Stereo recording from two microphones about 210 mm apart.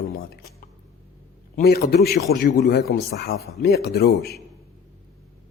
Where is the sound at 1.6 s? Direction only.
50° left (ahead or behind).